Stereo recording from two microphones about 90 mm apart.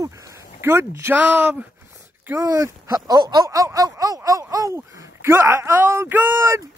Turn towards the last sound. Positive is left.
turn(degrees=-25)  # may be behind; listen again after turning